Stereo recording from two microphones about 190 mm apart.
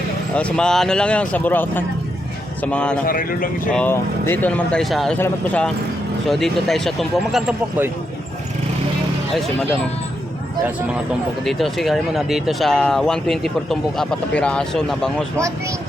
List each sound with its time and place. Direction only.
0.3 s speech: 5° left (ahead or behind)
3.1 s speech: 45° left (ahead or behind)
3.7 s speech: 5° left (ahead or behind)
11.4 s speech: centre (ahead or behind)